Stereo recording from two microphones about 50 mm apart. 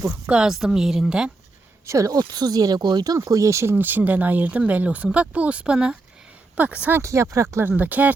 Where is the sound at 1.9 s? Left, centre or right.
Right.